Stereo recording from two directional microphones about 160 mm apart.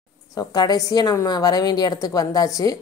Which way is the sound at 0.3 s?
25° left (ahead or behind).